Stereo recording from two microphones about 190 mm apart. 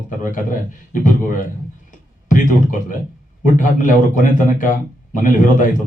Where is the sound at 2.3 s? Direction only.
45° left (ahead or behind).